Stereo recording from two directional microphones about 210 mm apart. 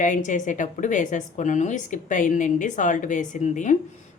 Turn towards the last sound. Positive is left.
turn(degrees=35)  # may be behind; listen again after turning